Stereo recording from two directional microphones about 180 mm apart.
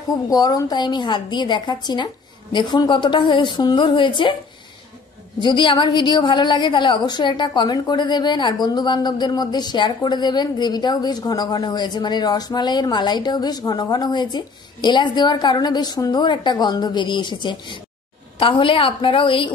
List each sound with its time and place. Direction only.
0.1 s a woman's voice: 20° left (ahead or behind)
5.4 s a woman's voice: 25° left (ahead or behind)